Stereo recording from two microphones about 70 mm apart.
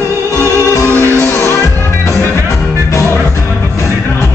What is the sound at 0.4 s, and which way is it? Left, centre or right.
Music, right.